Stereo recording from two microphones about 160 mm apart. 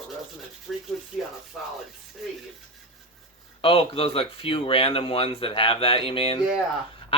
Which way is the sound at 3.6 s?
35° left (ahead or behind).